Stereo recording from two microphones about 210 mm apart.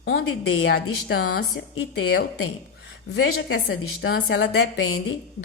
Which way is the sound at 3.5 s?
80° left.